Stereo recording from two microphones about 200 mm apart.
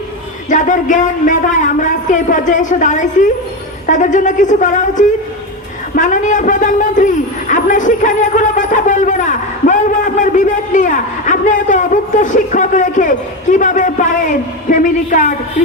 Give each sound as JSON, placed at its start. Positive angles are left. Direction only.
{"t": 0.5, "sound": "a man's voice", "side_deg": 40}